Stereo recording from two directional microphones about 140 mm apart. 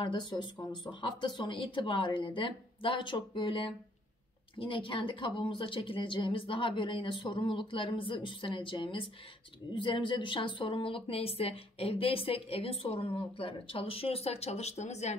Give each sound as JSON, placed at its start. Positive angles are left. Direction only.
{"t": 0.0, "sound": "speech", "side_deg": 35}